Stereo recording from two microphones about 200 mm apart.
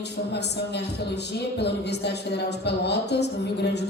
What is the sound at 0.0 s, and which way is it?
A man's voice, 55° left (ahead or behind).